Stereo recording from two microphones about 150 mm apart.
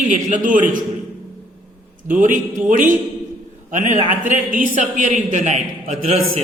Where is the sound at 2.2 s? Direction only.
60° right (ahead or behind).